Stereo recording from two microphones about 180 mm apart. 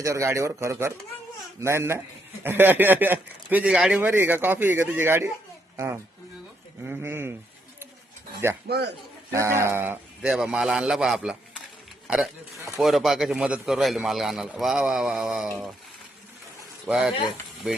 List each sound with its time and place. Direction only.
0.0 s a woman's voice: 15° right (ahead or behind)
8.6 s a man's voice: 65° right (ahead or behind)
9.3 s speech: 15° right (ahead or behind)
16.8 s speech: 5° right (ahead or behind)